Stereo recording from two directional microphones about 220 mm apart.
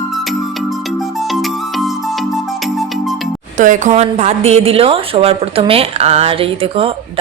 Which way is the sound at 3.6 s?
35° right (ahead or behind).